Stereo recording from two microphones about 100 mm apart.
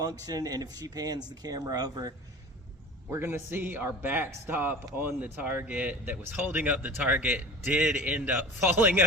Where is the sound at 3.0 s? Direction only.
25° right (ahead or behind).